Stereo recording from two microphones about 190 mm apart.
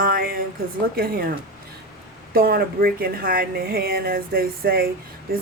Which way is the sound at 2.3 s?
50° right (ahead or behind).